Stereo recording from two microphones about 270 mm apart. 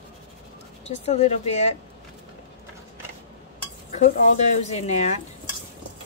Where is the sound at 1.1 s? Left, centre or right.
Left.